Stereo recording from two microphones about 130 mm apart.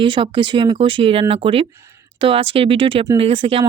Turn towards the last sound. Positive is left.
turn(degrees=-45)  # may be behind; listen again after turning